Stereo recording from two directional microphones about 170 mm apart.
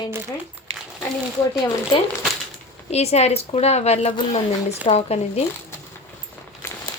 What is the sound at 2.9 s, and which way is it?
A woman's voice, 40° left (ahead or behind).